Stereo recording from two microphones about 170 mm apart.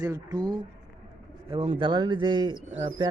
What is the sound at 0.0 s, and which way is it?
Speech, 20° right (ahead or behind).